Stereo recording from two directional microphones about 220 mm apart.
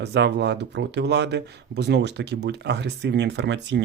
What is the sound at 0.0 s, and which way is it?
Speech, 50° right (ahead or behind).